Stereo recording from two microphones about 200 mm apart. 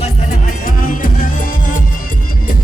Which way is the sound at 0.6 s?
45° left (ahead or behind).